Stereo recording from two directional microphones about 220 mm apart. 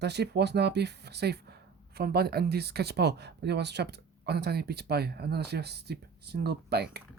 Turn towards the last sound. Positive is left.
turn(degrees=-50)  # may be behind; listen again after turning